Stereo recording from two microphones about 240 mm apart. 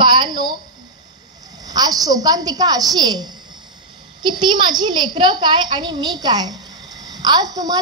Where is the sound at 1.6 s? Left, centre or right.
Centre.